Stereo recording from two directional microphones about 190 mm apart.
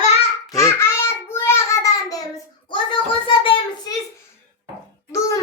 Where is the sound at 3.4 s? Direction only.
25° left (ahead or behind).